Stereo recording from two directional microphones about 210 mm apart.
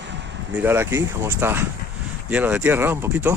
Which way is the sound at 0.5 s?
10° right (ahead or behind).